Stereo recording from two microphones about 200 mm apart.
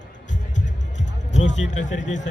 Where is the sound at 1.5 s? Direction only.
40° left (ahead or behind).